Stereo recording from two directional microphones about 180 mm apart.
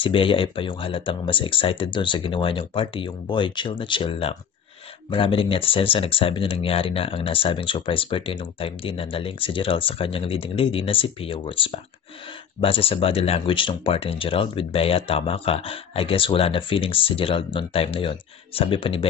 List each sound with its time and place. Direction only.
0.0 s speech: 30° left (ahead or behind)